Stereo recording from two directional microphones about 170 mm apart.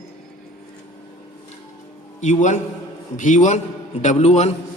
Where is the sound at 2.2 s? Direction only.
45° left (ahead or behind).